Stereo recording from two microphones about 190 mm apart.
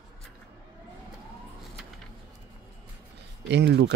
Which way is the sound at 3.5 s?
60° right (ahead or behind).